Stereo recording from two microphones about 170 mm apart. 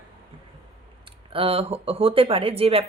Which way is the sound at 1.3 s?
35° right (ahead or behind).